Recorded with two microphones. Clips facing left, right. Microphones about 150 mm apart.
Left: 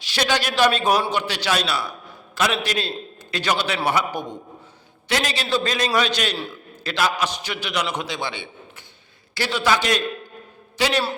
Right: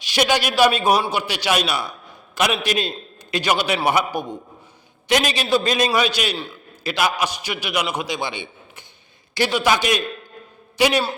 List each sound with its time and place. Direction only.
0.0 s a man's voice: 15° right (ahead or behind)